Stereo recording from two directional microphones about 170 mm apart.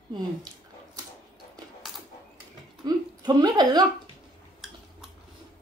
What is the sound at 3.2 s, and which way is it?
Speech, 25° right (ahead or behind).